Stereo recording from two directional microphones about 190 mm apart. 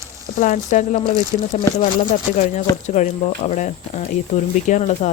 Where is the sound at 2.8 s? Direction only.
35° left (ahead or behind).